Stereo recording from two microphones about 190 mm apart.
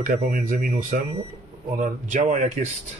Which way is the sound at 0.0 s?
50° right (ahead or behind).